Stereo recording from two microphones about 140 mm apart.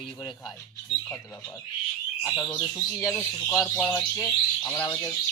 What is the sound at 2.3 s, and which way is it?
Speech, 15° left (ahead or behind).